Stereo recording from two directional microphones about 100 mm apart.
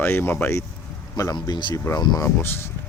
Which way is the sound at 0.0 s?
25° left (ahead or behind).